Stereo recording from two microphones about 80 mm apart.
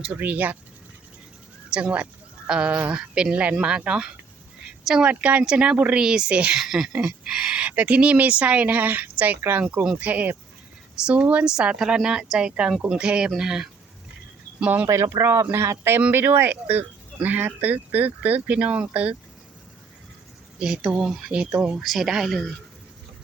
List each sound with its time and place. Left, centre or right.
0.1 s speech: right
1.7 s speech: centre
6.6 s speech: centre
14.6 s speech: right
14.8 s speech: right; by 19.1 s centre
20.6 s speech: centre